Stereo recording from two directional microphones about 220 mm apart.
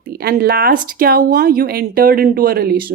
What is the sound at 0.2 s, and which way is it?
Speech, 45° right (ahead or behind).